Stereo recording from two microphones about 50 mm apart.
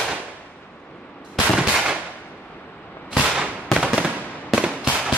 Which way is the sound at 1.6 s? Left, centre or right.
Centre.